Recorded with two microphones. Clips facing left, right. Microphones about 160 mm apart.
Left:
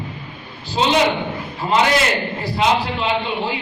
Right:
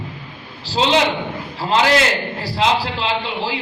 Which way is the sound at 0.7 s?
90° right.